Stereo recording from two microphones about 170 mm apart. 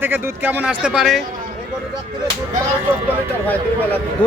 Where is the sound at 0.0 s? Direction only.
10° right (ahead or behind).